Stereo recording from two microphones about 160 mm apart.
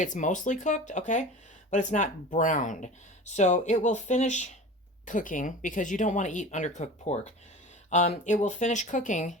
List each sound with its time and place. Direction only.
0.0 s speech: 50° left (ahead or behind)